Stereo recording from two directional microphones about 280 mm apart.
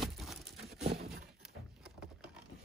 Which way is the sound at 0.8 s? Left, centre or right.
Right.